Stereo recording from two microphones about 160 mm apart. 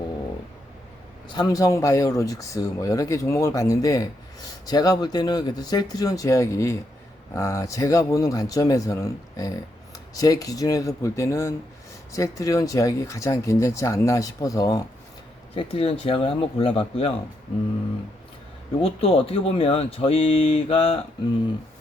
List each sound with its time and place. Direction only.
1.3 s speech: 25° left (ahead or behind)
15.5 s speech: 35° left (ahead or behind)
18.8 s speech: 35° left (ahead or behind)